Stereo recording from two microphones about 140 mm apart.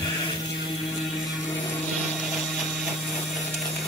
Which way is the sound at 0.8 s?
Centre (ahead or behind).